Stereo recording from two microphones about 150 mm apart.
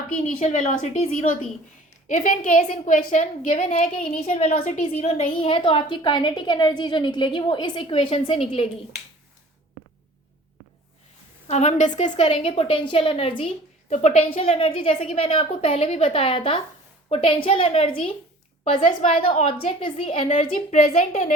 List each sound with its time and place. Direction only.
0.2 s a woman's voice: 50° left (ahead or behind)
11.4 s a woman's voice: 50° left (ahead or behind)
20.7 s a woman's voice: 60° left (ahead or behind)